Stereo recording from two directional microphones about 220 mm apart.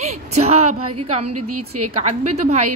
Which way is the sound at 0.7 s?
90° right.